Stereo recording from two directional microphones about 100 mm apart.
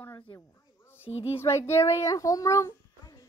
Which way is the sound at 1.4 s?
25° left (ahead or behind).